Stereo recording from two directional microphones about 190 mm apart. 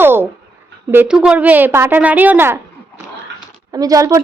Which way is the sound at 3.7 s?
20° right (ahead or behind).